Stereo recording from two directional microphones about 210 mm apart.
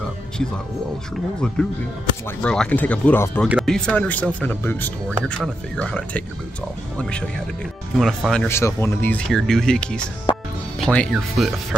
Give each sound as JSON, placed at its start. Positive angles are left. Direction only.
{"t": 1.1, "sound": "speech", "side_deg": 5}
{"t": 10.3, "sound": "music", "side_deg": 20}
{"t": 10.9, "sound": "speech", "side_deg": 5}